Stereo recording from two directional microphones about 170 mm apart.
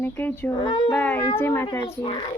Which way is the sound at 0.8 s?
10° left (ahead or behind).